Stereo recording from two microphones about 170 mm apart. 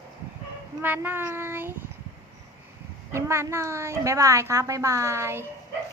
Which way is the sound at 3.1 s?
15° right (ahead or behind).